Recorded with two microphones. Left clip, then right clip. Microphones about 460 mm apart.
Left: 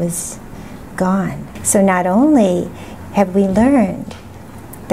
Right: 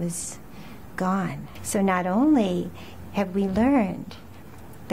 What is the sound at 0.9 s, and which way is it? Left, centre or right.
A woman's voice, left.